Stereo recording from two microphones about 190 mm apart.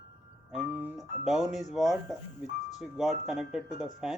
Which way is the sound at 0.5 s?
5° right (ahead or behind).